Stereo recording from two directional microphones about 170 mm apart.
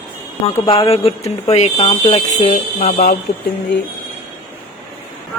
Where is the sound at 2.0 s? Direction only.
30° left (ahead or behind).